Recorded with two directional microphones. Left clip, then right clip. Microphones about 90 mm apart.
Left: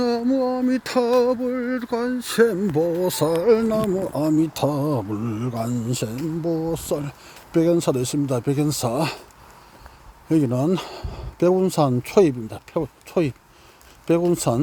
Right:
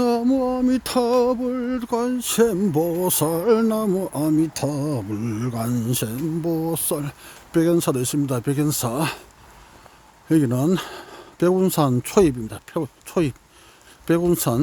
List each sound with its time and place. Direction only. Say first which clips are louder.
0.0 s mantra: right 1 dB; 50° right (ahead or behind)
0.9 s speech: left 1 dB; 35° right (ahead or behind)
1.4 s speech: left 1 dB; 45° right (ahead or behind)
4.1 s speech: left 1 dB; 30° right (ahead or behind)
4.4 s speech: left 2 dB; 5° right (ahead or behind)
5.5 s speech: right 1 dB; 35° right (ahead or behind)
7.5 s speech: even; 25° right (ahead or behind)
10.4 s speech: even; 35° right (ahead or behind)
10.8 s speech: right 1 dB; 20° right (ahead or behind)